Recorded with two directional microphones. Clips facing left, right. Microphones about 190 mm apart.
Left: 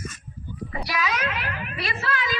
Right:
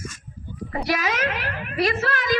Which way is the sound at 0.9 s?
50° right (ahead or behind).